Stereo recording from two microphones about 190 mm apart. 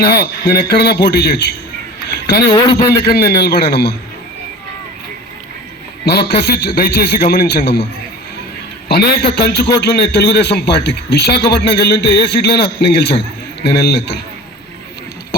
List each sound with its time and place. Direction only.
0.0 s a man's voice: 55° left (ahead or behind)
2.5 s a man's voice: 20° left (ahead or behind)
3.0 s a man's voice: 55° left (ahead or behind)
6.1 s a man's voice: 55° left (ahead or behind)
8.9 s a man's voice: 55° left (ahead or behind)